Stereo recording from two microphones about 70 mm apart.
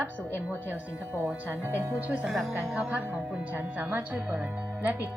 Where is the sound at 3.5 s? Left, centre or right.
Right.